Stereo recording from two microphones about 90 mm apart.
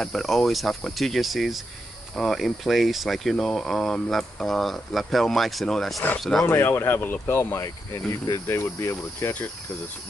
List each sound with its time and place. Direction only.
0.0 s speech: 5° left (ahead or behind)
6.4 s speech: 25° left (ahead or behind)
7.5 s speech: 35° left (ahead or behind)